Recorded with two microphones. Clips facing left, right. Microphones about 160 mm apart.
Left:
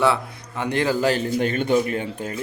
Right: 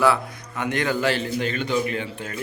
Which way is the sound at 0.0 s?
25° left (ahead or behind).